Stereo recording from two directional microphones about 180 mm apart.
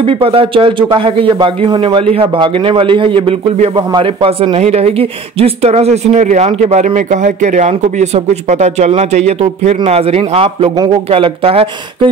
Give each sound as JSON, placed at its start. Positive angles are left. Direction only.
{"t": 0.0, "sound": "speech", "side_deg": -30}